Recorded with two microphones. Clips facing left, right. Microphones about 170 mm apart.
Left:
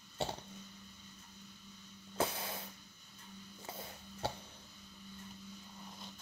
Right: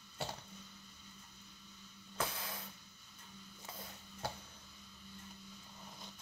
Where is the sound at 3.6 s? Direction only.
30° left (ahead or behind).